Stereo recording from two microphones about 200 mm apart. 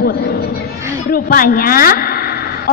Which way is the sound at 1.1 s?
45° left (ahead or behind).